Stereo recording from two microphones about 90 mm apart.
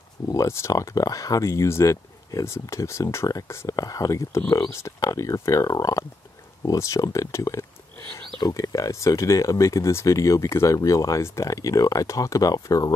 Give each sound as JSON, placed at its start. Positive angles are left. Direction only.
{"t": 0.3, "sound": "speech", "side_deg": 35}